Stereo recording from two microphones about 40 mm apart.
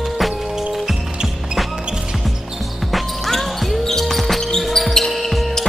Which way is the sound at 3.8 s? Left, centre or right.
Centre.